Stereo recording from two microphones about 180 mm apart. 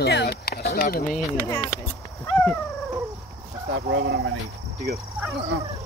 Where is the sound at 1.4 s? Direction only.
15° left (ahead or behind).